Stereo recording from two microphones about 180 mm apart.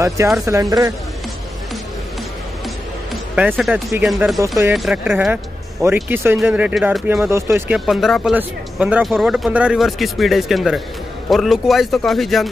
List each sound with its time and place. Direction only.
0.5 s speech: 20° right (ahead or behind)
3.5 s speech: centre (ahead or behind)
4.4 s speech: 15° right (ahead or behind)
4.7 s speech: centre (ahead or behind)
7.8 s speech: centre (ahead or behind)